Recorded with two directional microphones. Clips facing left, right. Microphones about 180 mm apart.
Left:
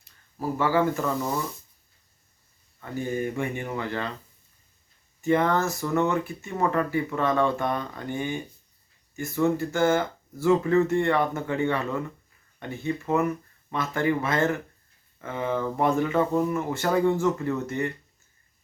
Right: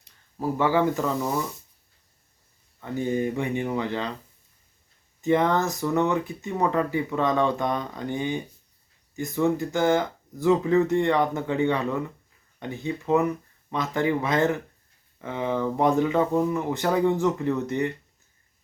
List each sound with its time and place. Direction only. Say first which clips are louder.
0.0 s speech: right 2 dB; 15° right (ahead or behind)
2.8 s speech: right 3 dB; 20° right (ahead or behind)
5.2 s speech: right 1 dB; 15° right (ahead or behind)